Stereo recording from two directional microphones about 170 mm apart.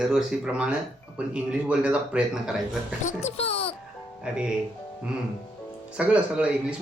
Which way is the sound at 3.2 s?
35° left (ahead or behind).